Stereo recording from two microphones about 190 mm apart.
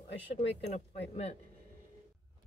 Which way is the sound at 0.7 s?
35° left (ahead or behind).